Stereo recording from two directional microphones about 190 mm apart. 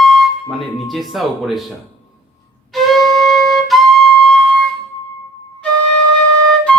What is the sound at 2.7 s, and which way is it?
Flute, centre (ahead or behind).